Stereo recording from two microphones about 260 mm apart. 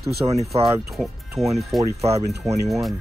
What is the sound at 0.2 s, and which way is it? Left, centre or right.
Speech, centre.